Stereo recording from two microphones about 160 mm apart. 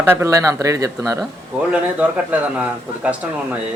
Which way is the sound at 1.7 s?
10° right (ahead or behind).